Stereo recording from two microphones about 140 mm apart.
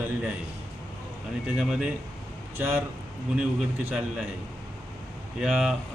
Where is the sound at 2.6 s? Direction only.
20° right (ahead or behind).